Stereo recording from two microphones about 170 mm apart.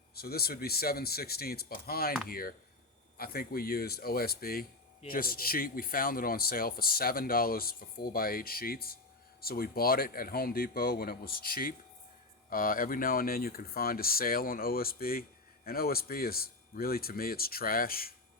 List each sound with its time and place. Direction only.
0.1 s a man's voice: 65° left (ahead or behind)